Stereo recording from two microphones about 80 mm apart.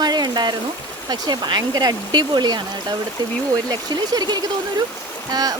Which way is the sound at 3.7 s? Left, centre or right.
Right.